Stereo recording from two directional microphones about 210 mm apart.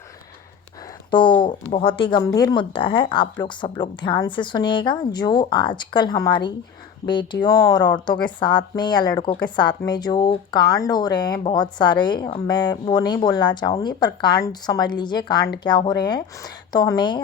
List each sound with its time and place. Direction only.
1.1 s speech: 20° left (ahead or behind)